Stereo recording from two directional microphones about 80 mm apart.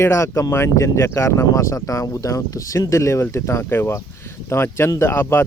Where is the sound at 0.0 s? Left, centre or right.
Left.